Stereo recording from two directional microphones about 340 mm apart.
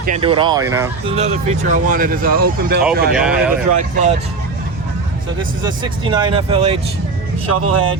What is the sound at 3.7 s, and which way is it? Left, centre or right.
Speech, right.